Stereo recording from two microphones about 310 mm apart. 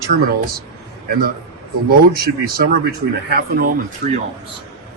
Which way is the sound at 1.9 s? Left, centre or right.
Right.